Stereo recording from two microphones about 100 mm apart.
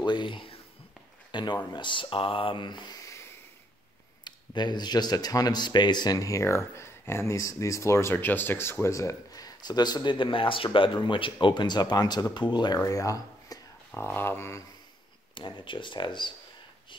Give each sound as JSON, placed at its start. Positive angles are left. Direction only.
{"t": 0.0, "sound": "a sound", "side_deg": 50}
{"t": 1.3, "sound": "speech", "side_deg": 45}
{"t": 4.2, "sound": "speech", "side_deg": 45}
{"t": 13.9, "sound": "speech", "side_deg": 20}
{"t": 15.3, "sound": "speech", "side_deg": 55}